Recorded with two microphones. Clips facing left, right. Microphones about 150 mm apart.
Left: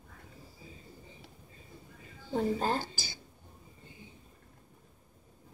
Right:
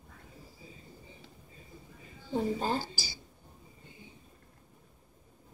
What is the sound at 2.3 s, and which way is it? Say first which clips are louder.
Speech: left 1 dB; 5° right (ahead or behind).